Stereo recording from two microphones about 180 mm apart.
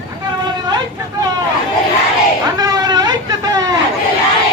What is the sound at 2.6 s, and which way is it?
Speech, 20° right (ahead or behind).